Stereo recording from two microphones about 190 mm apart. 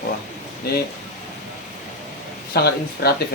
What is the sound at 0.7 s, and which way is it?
Speech, 55° left (ahead or behind).